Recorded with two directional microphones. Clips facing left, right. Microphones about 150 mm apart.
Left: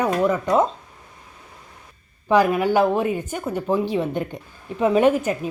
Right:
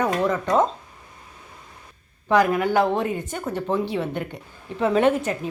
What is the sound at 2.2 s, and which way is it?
Speech, 15° left (ahead or behind).